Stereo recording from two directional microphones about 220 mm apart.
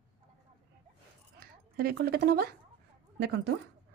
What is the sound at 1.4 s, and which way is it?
A woman's voice, 45° right (ahead or behind).